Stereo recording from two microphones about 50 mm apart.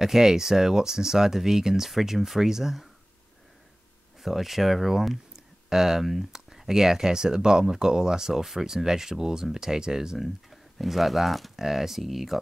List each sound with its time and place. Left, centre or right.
0.0 s speech: centre
4.2 s speech: centre
10.2 s speech: centre